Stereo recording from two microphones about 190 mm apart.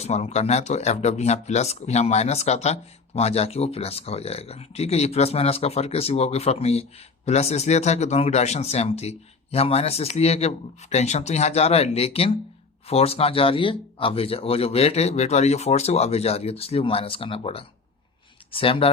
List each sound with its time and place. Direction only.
0.0 s speech: 35° left (ahead or behind)